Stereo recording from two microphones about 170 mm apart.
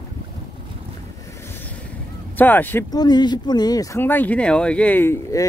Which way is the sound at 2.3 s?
10° left (ahead or behind).